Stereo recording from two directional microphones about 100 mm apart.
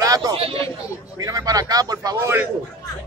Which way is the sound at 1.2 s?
35° right (ahead or behind).